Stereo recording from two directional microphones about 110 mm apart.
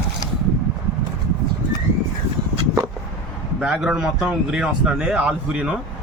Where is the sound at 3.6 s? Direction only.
5° right (ahead or behind).